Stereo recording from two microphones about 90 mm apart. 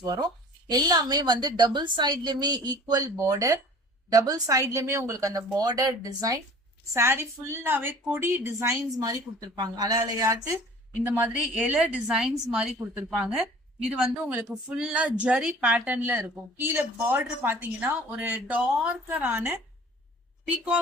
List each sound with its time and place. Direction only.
0.0 s a woman's voice: 45° right (ahead or behind)
6.9 s speech: 30° right (ahead or behind)
8.5 s speech: 35° right (ahead or behind)
11.2 s a woman's voice: 10° right (ahead or behind)